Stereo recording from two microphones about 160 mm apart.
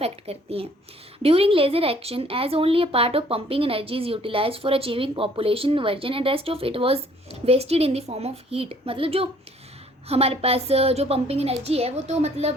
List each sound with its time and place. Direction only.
0.0 s speech: 40° right (ahead or behind)